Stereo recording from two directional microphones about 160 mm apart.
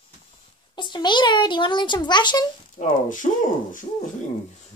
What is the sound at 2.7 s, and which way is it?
Speech, 55° left (ahead or behind).